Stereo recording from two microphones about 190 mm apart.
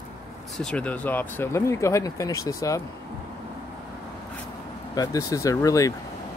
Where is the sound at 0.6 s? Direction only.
5° left (ahead or behind).